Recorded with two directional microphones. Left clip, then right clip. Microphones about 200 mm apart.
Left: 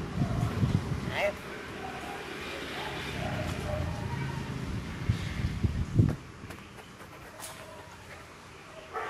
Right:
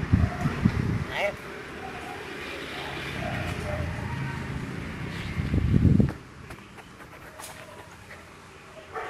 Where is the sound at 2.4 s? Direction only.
55° left (ahead or behind).